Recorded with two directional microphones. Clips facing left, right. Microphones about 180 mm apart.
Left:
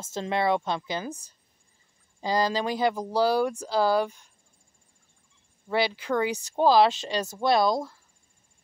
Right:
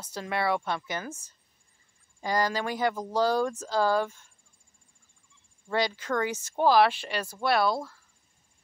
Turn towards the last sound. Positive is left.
turn(degrees=15)  # may be behind; listen again after turning